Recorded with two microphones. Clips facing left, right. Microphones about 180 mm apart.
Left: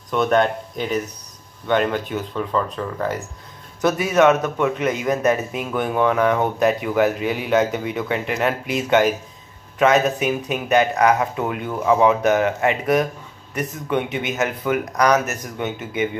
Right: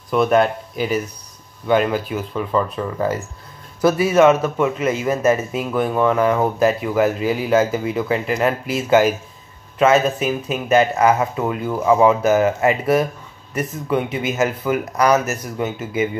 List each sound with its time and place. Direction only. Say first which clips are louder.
0.1 s a man's voice: right 2 dB; 5° right (ahead or behind)